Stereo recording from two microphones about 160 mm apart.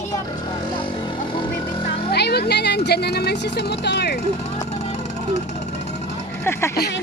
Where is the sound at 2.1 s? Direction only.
90° left.